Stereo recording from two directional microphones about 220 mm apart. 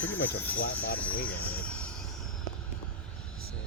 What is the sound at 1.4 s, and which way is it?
Vehicle, 5° left (ahead or behind).